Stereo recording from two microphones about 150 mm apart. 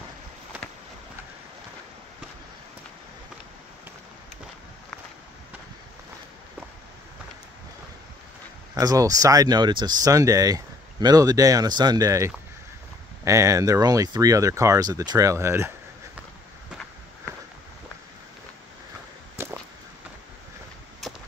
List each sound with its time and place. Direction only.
8.7 s speech: 25° right (ahead or behind)
19.3 s a sound: 15° right (ahead or behind)
21.0 s walk: centre (ahead or behind)